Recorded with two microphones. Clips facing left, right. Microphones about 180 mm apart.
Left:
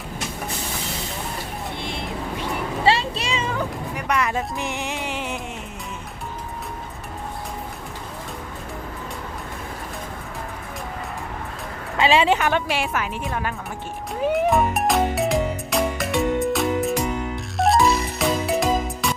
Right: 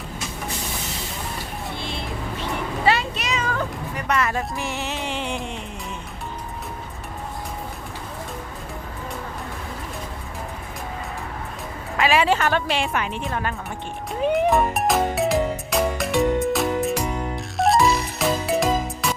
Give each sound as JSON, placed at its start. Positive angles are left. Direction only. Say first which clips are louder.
{"t": 1.7, "sound": "vehicle", "louder": "left 1 dB", "side_deg": 20}
{"t": 2.8, "sound": "a sound", "louder": "left 1 dB", "side_deg": 30}
{"t": 3.5, "sound": "music", "louder": "even", "side_deg": 10}
{"t": 11.9, "sound": "a woman's voice", "louder": "left 1 dB", "side_deg": 25}
{"t": 14.1, "sound": "music", "louder": "right 1 dB", "side_deg": 0}